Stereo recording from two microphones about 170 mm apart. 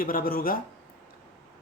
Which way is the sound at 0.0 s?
55° left (ahead or behind).